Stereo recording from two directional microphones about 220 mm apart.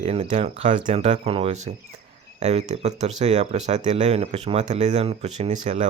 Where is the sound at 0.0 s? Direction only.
30° right (ahead or behind).